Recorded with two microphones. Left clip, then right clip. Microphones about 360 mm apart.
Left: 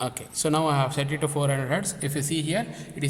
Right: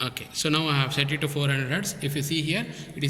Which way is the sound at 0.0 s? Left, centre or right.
Centre.